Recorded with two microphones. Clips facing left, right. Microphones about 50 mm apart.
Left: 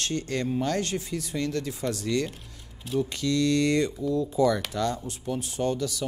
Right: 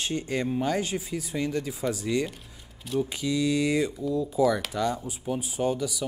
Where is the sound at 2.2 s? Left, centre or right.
Centre.